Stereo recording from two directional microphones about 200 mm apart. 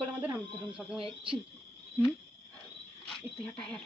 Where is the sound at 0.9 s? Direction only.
25° right (ahead or behind).